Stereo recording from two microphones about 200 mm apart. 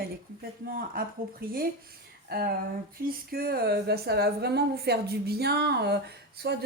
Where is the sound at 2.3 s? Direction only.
50° right (ahead or behind).